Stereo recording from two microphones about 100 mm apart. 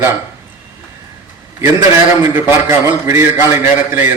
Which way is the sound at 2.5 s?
25° right (ahead or behind).